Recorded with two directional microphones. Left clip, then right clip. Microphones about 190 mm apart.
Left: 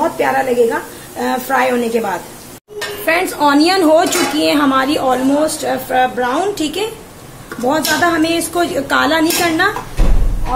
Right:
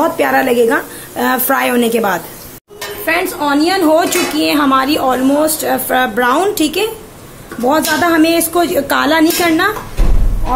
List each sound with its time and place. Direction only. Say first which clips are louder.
0.2 s a woman's voice: right 1 dB; 30° right (ahead or behind)
3.1 s speech: left 1 dB; centre (ahead or behind)
5.9 s a woman's voice: right 2 dB; 30° right (ahead or behind)